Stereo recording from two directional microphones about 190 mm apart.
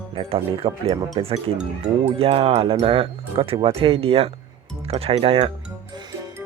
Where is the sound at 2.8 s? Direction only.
30° right (ahead or behind).